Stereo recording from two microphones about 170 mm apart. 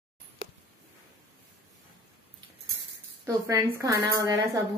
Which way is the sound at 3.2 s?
20° right (ahead or behind).